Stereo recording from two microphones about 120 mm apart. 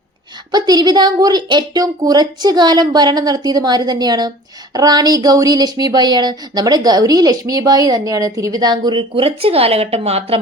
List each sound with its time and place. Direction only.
0.5 s speech: 35° right (ahead or behind); by 10.4 s 55° right (ahead or behind)